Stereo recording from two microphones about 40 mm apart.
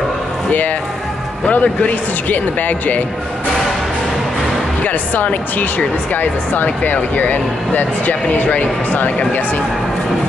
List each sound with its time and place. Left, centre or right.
1.4 s a man's voice: left
4.8 s speech: left